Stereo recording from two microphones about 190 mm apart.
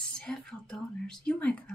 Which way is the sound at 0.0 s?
5° left (ahead or behind).